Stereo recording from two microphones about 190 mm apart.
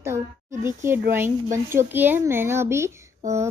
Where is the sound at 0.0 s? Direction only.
15° right (ahead or behind).